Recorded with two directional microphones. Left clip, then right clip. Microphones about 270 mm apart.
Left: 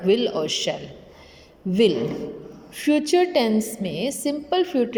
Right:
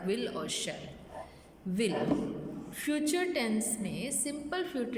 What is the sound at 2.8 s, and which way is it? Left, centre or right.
A woman's voice, centre.